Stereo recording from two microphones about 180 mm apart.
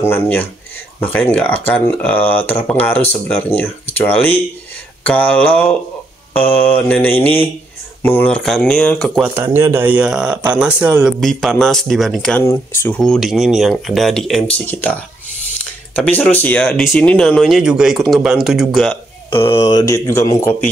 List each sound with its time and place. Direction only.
0.0 s speech: 10° left (ahead or behind)
9.2 s speech: 15° right (ahead or behind)
19.3 s speech: 15° left (ahead or behind)